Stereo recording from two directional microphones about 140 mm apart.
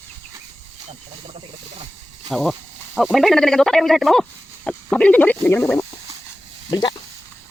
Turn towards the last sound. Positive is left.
turn(degrees=30)  # may be behind; listen again after turning